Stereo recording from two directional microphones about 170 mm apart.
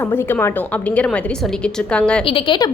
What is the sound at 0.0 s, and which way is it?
A woman's voice, 15° left (ahead or behind).